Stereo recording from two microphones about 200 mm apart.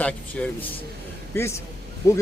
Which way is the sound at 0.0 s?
5° left (ahead or behind).